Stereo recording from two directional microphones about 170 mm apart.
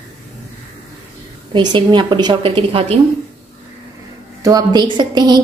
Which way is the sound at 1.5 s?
25° right (ahead or behind).